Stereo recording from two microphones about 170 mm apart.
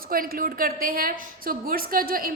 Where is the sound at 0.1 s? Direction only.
55° right (ahead or behind).